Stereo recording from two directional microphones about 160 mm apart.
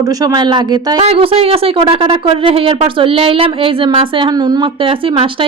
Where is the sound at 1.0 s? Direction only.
40° right (ahead or behind).